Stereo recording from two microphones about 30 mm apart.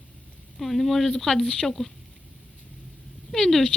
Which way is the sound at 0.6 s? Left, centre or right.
Centre.